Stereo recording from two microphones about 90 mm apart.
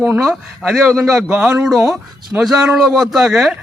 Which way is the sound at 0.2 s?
Centre (ahead or behind).